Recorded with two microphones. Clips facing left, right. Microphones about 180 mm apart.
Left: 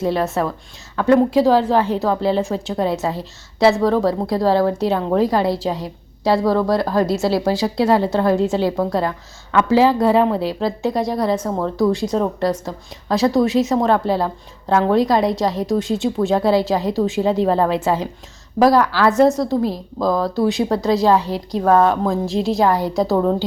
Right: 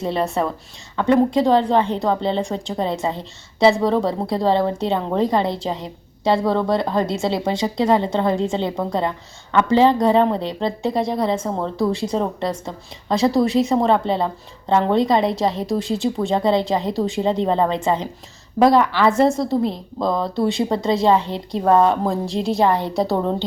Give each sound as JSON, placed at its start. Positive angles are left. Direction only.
{"t": 0.0, "sound": "a woman's voice", "side_deg": 0}
{"t": 6.7, "sound": "speech", "side_deg": -25}
{"t": 7.2, "sound": "a woman's voice", "side_deg": 5}